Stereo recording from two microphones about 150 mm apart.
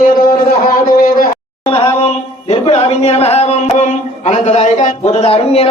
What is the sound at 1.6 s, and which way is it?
Speech, 35° left (ahead or behind).